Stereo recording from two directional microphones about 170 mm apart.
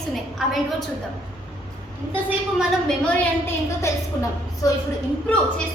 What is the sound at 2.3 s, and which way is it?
Speech, 5° right (ahead or behind).